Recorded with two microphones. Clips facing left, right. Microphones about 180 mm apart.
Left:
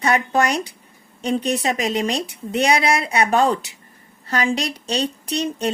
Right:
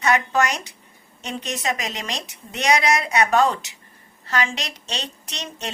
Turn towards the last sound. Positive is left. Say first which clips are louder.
# left 11 dB
turn(degrees=35)  # may be behind; listen again after turning